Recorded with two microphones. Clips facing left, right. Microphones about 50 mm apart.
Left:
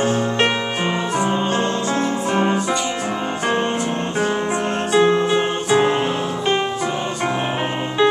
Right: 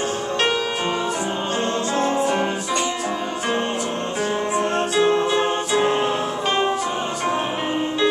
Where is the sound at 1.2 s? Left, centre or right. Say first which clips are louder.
Left 4 dB; left.